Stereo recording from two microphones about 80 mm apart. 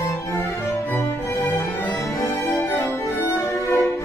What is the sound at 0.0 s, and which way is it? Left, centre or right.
Music, left.